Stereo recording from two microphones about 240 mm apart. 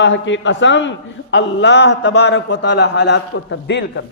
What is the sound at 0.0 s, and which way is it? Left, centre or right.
A man's voice, left.